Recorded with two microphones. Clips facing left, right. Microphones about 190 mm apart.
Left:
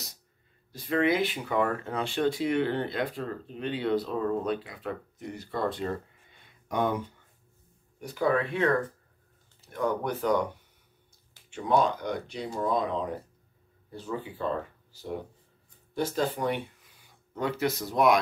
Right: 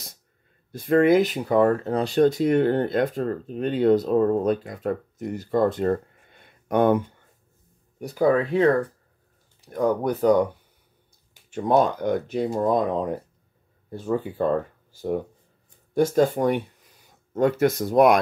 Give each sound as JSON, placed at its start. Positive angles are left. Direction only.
{"t": 0.7, "sound": "speech", "side_deg": -50}
{"t": 8.0, "sound": "speech", "side_deg": -40}
{"t": 11.5, "sound": "speech", "side_deg": -45}